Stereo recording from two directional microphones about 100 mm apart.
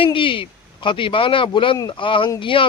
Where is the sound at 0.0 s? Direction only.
60° left (ahead or behind).